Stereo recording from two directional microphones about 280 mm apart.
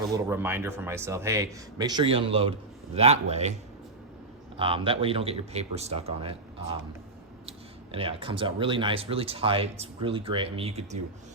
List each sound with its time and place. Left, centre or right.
0.1 s speech: centre
7.9 s speech: centre